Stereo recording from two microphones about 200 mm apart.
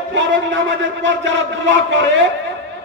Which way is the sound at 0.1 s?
65° right (ahead or behind).